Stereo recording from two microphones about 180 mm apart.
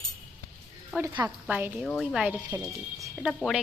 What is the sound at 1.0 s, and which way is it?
A woman's voice, 10° right (ahead or behind).